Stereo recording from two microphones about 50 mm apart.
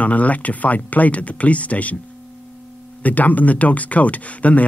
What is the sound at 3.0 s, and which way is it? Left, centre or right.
Speech, left.